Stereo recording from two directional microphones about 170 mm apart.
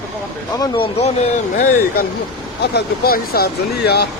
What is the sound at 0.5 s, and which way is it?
Speech, 25° left (ahead or behind).